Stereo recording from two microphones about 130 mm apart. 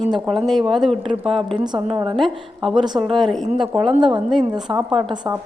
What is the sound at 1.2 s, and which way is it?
Speech, 40° right (ahead or behind).